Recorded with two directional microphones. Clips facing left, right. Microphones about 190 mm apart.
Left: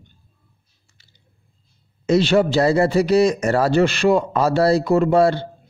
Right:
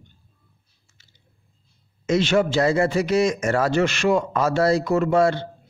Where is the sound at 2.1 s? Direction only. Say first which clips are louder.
Left 3 dB; 35° left (ahead or behind).